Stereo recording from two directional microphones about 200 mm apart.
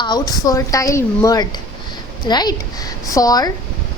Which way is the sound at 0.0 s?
20° left (ahead or behind).